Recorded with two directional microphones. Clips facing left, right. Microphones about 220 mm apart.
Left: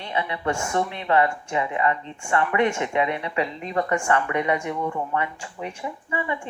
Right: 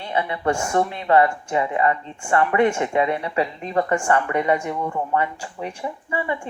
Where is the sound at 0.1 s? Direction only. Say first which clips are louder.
Right 4 dB; 40° right (ahead or behind).